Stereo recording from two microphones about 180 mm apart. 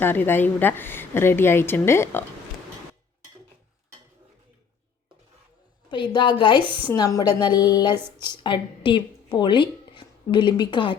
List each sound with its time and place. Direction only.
0.0 s a woman's voice: 10° left (ahead or behind)
5.9 s a woman's voice: 25° left (ahead or behind)